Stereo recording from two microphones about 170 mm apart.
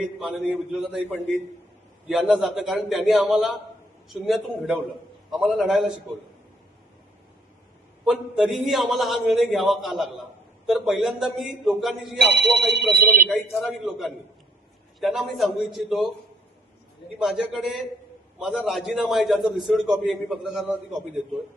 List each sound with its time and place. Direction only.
0.0 s a man's voice: centre (ahead or behind)
2.0 s a man's voice: centre (ahead or behind)
8.0 s a man's voice: centre (ahead or behind)
12.2 s speech: 90° right; by 13.2 s 60° right (ahead or behind)
13.2 s a man's voice: centre (ahead or behind)
17.2 s a man's voice: centre (ahead or behind)